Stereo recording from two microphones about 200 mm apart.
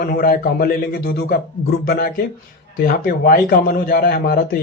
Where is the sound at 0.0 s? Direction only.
45° left (ahead or behind).